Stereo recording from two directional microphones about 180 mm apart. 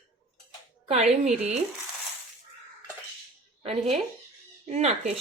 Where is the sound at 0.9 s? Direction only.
35° right (ahead or behind).